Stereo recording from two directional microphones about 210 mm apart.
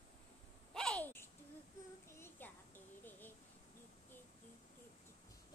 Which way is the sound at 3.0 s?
10° left (ahead or behind).